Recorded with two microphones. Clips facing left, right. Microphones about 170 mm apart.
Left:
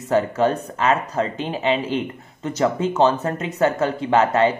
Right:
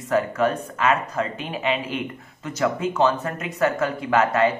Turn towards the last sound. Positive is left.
turn(degrees=30)  # may be behind; listen again after turning